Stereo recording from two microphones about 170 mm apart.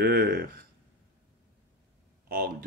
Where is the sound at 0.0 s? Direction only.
70° right (ahead or behind).